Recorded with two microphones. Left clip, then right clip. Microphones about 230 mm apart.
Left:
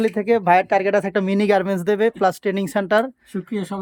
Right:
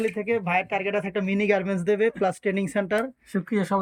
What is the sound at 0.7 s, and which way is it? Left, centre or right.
Speech, centre.